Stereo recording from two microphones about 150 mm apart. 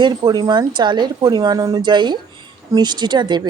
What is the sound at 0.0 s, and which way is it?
A woman's voice, 25° right (ahead or behind).